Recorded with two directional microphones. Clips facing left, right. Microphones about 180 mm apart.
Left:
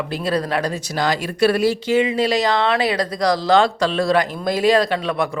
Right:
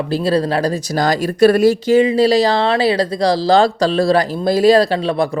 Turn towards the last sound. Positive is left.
turn(degrees=-30)  # may be behind; listen again after turning